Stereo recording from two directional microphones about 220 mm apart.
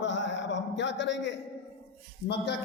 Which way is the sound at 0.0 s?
55° left (ahead or behind).